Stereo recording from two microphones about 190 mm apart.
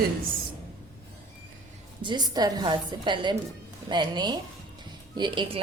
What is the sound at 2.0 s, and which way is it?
A woman's voice, 20° right (ahead or behind).